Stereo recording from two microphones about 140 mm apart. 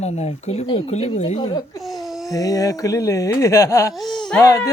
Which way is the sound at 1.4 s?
35° left (ahead or behind).